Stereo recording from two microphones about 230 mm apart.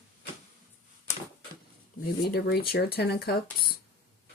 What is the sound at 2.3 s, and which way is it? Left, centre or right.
Speech, left.